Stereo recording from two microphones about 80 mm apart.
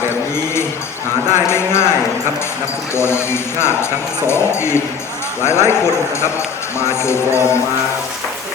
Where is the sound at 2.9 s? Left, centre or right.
Left.